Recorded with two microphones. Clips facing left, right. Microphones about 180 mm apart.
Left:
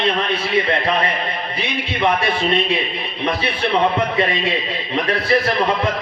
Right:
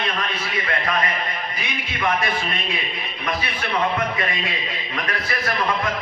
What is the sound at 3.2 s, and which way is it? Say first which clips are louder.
Speech: left 6 dB; 30° left (ahead or behind).